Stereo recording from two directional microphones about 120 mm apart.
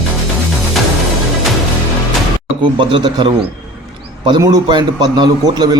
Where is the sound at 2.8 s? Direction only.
45° right (ahead or behind).